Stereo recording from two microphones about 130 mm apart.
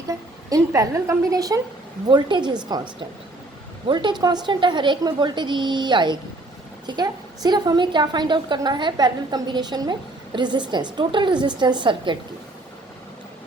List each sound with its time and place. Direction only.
0.1 s a woman's voice: 25° right (ahead or behind)
3.8 s a woman's voice: 35° right (ahead or behind)